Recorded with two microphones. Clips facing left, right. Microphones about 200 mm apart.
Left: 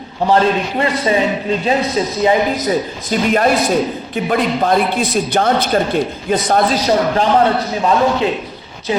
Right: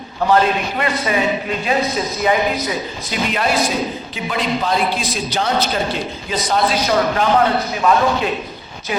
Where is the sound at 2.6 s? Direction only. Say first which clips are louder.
Left 6 dB; 45° left (ahead or behind).